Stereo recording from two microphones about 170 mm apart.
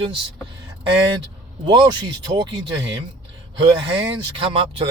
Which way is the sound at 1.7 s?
25° right (ahead or behind).